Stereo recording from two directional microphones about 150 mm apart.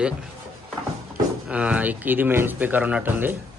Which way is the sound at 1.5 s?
10° right (ahead or behind).